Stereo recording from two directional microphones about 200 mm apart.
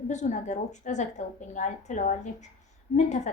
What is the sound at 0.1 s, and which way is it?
A woman's voice, 35° left (ahead or behind).